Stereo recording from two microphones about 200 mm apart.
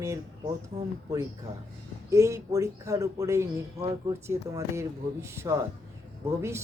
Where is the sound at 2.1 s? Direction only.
15° right (ahead or behind).